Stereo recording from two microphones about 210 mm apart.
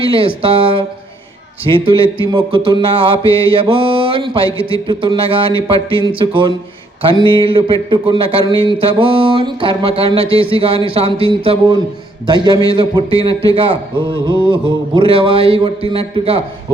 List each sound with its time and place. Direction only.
0.0 s a man's voice: 25° right (ahead or behind)